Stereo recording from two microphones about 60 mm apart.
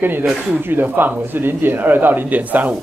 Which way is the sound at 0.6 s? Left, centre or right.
Right.